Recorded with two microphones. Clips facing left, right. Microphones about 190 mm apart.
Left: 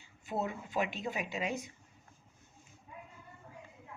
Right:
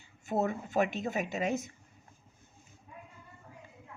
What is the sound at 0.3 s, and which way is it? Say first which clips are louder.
Speech: right 5 dB; 45° right (ahead or behind).